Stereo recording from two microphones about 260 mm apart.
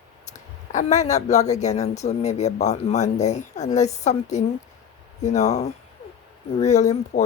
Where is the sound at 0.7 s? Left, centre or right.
Left.